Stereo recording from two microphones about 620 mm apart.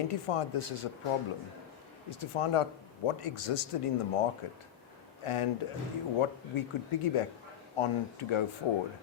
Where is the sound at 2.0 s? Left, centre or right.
Left.